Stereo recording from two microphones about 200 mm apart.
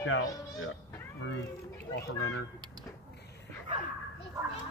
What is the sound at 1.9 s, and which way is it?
Speech, 90° left.